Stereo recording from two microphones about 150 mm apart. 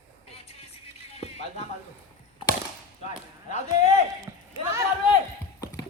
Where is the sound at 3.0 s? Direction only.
50° left (ahead or behind).